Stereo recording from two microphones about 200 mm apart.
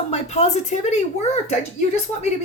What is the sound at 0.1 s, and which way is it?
Speech, 35° left (ahead or behind).